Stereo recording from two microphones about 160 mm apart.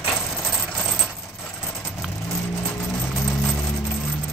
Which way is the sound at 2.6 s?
10° left (ahead or behind).